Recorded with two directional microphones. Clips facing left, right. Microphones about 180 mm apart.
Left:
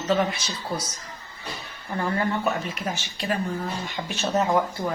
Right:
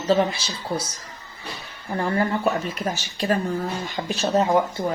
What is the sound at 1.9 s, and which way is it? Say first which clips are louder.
Speech: right 3 dB; 35° right (ahead or behind).